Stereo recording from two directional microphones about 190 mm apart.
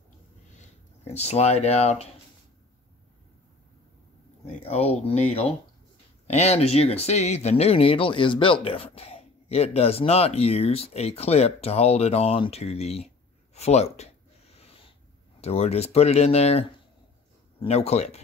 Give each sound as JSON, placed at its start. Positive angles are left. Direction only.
{"t": 1.1, "sound": "speech", "side_deg": 35}
{"t": 4.6, "sound": "speech", "side_deg": 35}
{"t": 13.6, "sound": "a sound", "side_deg": 35}
{"t": 15.4, "sound": "speech", "side_deg": 35}